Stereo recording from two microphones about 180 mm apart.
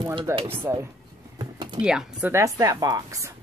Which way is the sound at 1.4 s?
25° right (ahead or behind).